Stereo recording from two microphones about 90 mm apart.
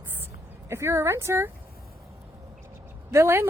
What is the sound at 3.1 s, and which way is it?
Speech, 30° right (ahead or behind).